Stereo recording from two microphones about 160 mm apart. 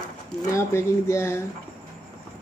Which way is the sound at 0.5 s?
15° left (ahead or behind).